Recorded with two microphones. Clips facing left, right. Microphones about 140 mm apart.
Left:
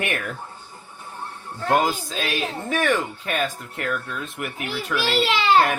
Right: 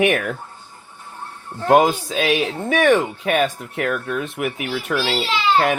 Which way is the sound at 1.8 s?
70° right (ahead or behind).